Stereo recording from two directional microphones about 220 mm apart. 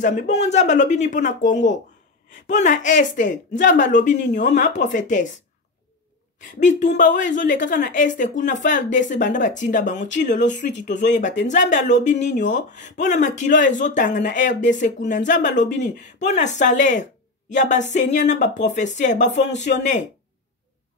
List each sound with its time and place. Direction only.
0.0 s a woman's voice: 35° left (ahead or behind)
6.6 s a woman's voice: 35° left (ahead or behind)